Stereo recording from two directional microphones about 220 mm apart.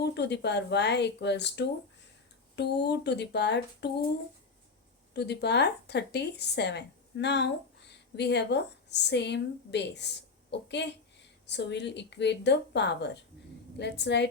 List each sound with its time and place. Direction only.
0.0 s speech: 50° left (ahead or behind)
5.1 s speech: 50° left (ahead or behind)